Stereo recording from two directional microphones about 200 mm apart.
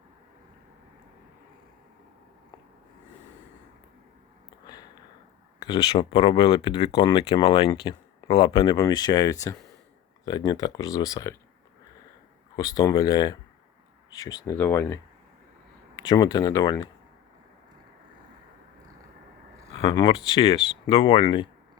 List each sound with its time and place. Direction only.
4.6 s a sound: 20° left (ahead or behind)
5.6 s speech: 25° left (ahead or behind)
12.5 s speech: 20° left (ahead or behind)
16.0 s speech: 20° left (ahead or behind)
19.8 s speech: 25° left (ahead or behind)